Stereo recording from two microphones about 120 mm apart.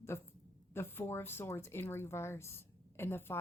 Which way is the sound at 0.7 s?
20° left (ahead or behind).